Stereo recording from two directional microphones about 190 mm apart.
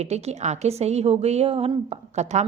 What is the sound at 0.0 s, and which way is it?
A woman's voice, 35° right (ahead or behind).